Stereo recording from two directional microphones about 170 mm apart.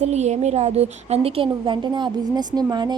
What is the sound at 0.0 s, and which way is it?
A woman's voice, 40° right (ahead or behind).